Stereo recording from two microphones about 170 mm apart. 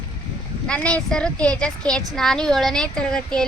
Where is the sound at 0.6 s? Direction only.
5° left (ahead or behind).